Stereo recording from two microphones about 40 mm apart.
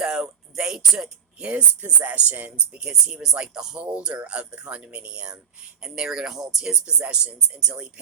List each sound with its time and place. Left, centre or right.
0.0 s music: centre
1.4 s speech: right
2.6 s speech: right
3.8 s speech: right
7.0 s speech: right